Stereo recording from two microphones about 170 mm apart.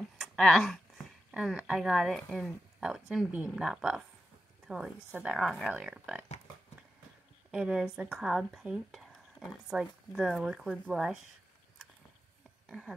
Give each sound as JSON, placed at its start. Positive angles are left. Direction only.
{"t": 0.2, "sound": "speech", "side_deg": 0}
{"t": 7.5, "sound": "speech", "side_deg": -5}
{"t": 12.6, "sound": "speech", "side_deg": -5}